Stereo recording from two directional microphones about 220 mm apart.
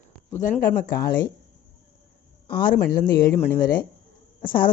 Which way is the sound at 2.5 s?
40° left (ahead or behind).